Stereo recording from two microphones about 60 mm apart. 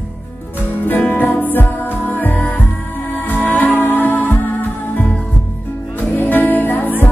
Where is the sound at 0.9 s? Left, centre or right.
Left.